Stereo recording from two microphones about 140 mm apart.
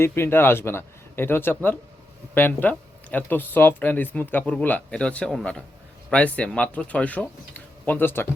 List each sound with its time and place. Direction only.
0.0 s speech: 15° left (ahead or behind)